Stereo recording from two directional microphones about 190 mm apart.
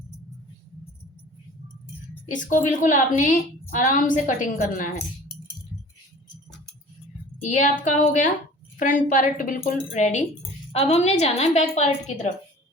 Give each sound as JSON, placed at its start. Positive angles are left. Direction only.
{"t": 2.2, "sound": "a woman's voice", "side_deg": 40}
{"t": 7.4, "sound": "a woman's voice", "side_deg": 40}